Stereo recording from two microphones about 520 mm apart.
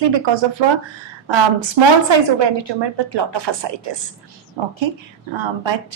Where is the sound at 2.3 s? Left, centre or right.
Right.